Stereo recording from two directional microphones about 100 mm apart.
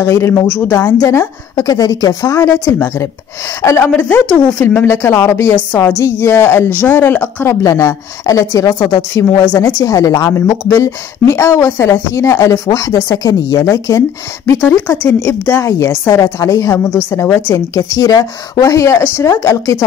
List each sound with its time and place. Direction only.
0.0 s speech: 30° left (ahead or behind)
7.6 s speech: 35° left (ahead or behind)
14.6 s speech: 20° left (ahead or behind)
17.7 s speech: 35° left (ahead or behind)